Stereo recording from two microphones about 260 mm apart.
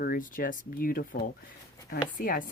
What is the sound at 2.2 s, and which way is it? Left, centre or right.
Speech, left.